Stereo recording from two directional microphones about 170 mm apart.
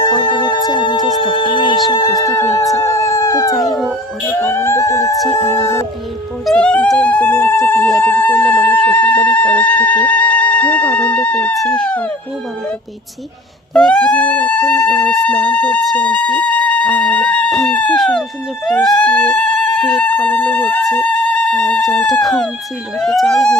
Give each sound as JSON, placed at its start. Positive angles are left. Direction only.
{"t": 0.0, "sound": "music", "side_deg": 25}
{"t": 2.7, "sound": "speech", "side_deg": 15}
{"t": 6.4, "sound": "speech", "side_deg": 5}
{"t": 13.7, "sound": "speech", "side_deg": 5}